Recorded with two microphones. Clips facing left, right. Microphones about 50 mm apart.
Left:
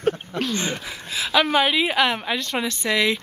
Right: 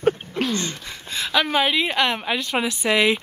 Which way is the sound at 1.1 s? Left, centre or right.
Centre.